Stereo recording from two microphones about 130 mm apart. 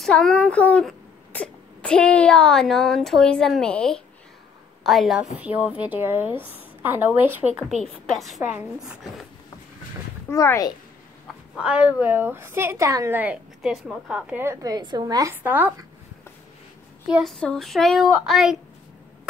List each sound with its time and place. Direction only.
0.0 s speech: 5° left (ahead or behind)
5.4 s a woman's voice: 10° right (ahead or behind)
7.8 s a woman's voice: centre (ahead or behind)
10.3 s speech: 25° left (ahead or behind)
11.5 s a woman's voice: 10° right (ahead or behind)
13.2 s speech: 5° right (ahead or behind)
14.3 s speech: 20° right (ahead or behind)
15.4 s a woman's voice: 15° right (ahead or behind)
17.2 s speech: 5° left (ahead or behind)